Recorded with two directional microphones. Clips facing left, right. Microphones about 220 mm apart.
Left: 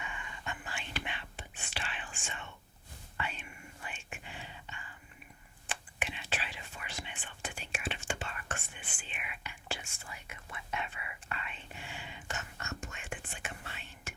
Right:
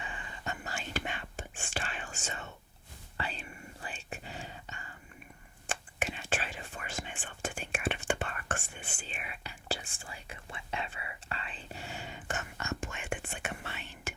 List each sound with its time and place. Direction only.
0.0 s whispering: 35° right (ahead or behind); by 8.6 s 50° right (ahead or behind)
8.6 s whispering: 40° right (ahead or behind)
12.5 s whispering: 90° right